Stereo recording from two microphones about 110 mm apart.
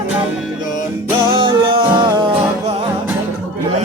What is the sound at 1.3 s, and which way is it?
Music, 50° right (ahead or behind).